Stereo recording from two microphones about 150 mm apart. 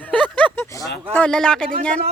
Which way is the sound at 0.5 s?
20° left (ahead or behind).